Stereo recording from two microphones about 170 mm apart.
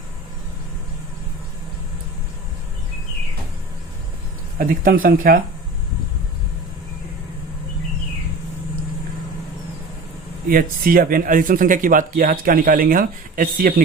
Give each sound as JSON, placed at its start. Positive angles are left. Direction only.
{"t": 4.5, "sound": "speech", "side_deg": -55}
{"t": 10.5, "sound": "speech", "side_deg": -55}